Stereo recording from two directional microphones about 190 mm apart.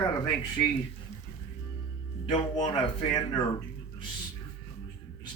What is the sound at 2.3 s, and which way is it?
Speech, 25° left (ahead or behind).